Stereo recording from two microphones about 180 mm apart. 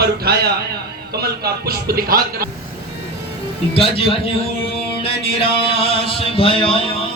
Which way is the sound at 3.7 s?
30° left (ahead or behind).